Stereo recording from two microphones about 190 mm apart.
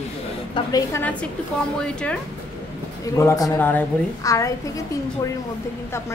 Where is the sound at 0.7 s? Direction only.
20° left (ahead or behind).